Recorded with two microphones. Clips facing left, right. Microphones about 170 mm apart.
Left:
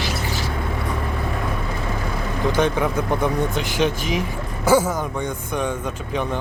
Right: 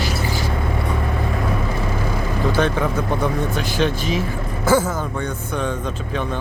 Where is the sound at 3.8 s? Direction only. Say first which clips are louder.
Right 1 dB; 15° left (ahead or behind).